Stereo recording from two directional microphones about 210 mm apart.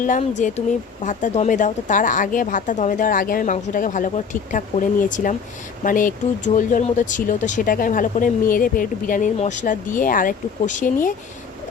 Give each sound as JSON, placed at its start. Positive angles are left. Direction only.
{"t": 0.0, "sound": "speech", "side_deg": 35}